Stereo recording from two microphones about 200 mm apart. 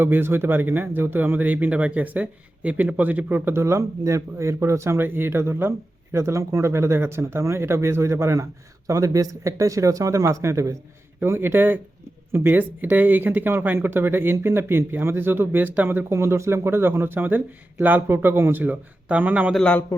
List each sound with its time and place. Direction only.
0.0 s speech: 10° right (ahead or behind)
19.6 s a man's voice: 10° left (ahead or behind)